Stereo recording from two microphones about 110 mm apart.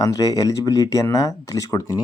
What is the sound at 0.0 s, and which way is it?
Speech, 35° left (ahead or behind).